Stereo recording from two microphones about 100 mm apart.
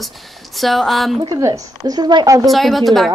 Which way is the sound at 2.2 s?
35° right (ahead or behind).